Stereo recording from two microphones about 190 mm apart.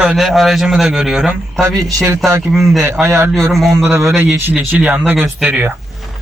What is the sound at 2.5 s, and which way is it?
Speech, centre (ahead or behind).